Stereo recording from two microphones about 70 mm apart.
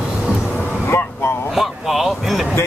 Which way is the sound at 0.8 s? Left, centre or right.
Left.